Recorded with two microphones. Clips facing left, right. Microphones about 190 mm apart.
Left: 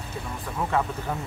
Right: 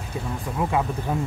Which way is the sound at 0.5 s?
15° right (ahead or behind).